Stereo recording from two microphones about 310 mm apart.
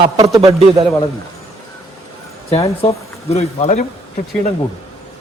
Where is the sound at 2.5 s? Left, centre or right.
Centre.